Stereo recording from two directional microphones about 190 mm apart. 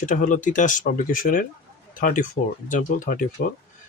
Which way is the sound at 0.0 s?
45° left (ahead or behind).